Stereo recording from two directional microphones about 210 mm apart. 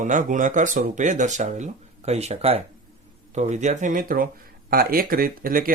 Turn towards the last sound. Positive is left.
turn(degrees=-40)  # may be behind; listen again after turning